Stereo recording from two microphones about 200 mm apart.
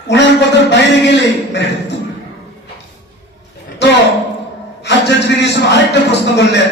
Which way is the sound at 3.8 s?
60° left (ahead or behind).